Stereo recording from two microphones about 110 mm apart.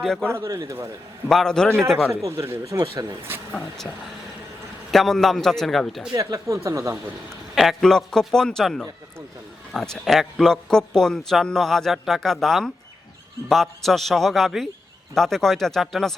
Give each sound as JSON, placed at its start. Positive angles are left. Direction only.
{"t": 0.0, "sound": "a man's voice", "side_deg": 5}
{"t": 0.3, "sound": "speech", "side_deg": -25}
{"t": 1.3, "sound": "a man's voice", "side_deg": 5}
{"t": 2.2, "sound": "speech", "side_deg": -25}
{"t": 3.5, "sound": "a man's voice", "side_deg": 5}
{"t": 6.1, "sound": "speech", "side_deg": -30}
{"t": 7.5, "sound": "a man's voice", "side_deg": 0}